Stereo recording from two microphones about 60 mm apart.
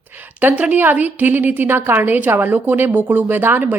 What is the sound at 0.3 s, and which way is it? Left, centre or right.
A woman's voice, right.